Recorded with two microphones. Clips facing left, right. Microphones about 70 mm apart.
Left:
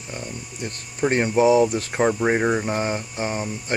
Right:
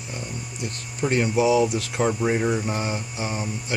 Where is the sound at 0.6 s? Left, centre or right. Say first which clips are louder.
Left 3 dB; left.